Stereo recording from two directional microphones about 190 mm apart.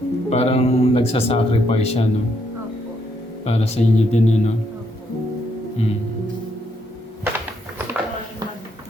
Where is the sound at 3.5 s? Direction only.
35° left (ahead or behind).